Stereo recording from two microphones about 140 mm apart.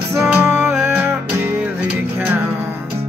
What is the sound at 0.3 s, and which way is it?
Music, 10° right (ahead or behind).